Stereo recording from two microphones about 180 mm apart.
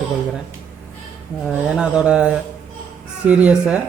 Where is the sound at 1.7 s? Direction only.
5° right (ahead or behind).